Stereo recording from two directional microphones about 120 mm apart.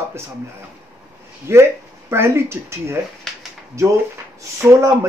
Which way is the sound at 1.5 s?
20° right (ahead or behind).